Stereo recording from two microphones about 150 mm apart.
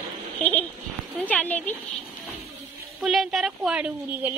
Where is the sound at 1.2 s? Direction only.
10° left (ahead or behind).